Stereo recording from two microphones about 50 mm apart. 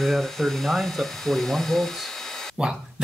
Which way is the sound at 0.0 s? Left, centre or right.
Centre.